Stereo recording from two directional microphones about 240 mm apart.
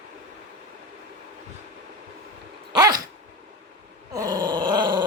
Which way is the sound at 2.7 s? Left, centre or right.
Centre.